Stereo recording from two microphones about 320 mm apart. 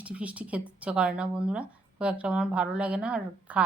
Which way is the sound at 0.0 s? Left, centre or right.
Centre.